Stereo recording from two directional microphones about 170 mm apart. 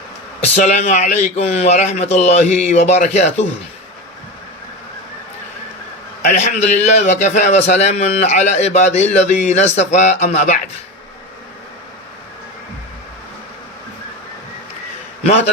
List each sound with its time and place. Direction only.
0.4 s a man's voice: 40° left (ahead or behind)
6.2 s a man's voice: 45° left (ahead or behind)